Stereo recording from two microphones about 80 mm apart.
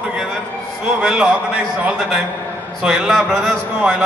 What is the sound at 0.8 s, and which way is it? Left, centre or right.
A man's voice, centre.